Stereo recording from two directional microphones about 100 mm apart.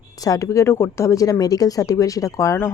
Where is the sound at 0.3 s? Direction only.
35° left (ahead or behind).